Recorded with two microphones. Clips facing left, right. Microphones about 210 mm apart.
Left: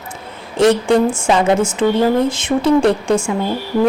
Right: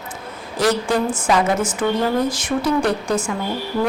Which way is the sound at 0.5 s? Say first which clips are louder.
Left 6 dB; 25° left (ahead or behind).